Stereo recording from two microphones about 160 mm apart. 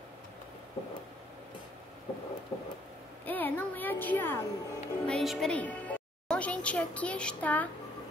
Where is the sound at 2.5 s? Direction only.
25° left (ahead or behind).